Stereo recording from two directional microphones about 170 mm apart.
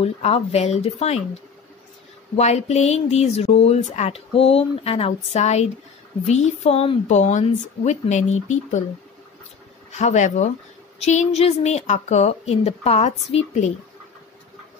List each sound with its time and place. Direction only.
0.0 s speech: 35° left (ahead or behind)
2.3 s speech: 40° left (ahead or behind)
9.9 s speech: 45° left (ahead or behind)